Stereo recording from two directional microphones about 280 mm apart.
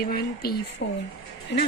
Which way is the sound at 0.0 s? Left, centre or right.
Left.